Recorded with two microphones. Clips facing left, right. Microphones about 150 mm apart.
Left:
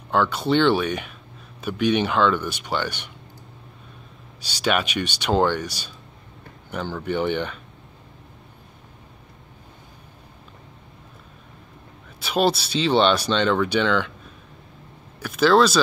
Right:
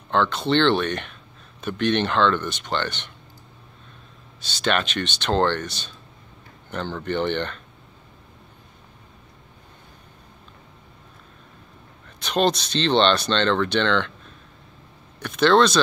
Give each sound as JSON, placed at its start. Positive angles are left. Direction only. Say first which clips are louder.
{"t": 0.1, "sound": "speech", "louder": "even", "side_deg": 10}
{"t": 4.4, "sound": "speech", "louder": "left 1 dB", "side_deg": 10}
{"t": 12.2, "sound": "speech", "louder": "even", "side_deg": 5}
{"t": 15.1, "sound": "speech", "louder": "even", "side_deg": 5}